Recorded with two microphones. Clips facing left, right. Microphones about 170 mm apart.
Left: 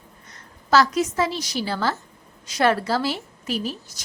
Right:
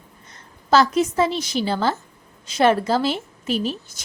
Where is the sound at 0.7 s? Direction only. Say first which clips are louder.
Right 2 dB; 25° right (ahead or behind).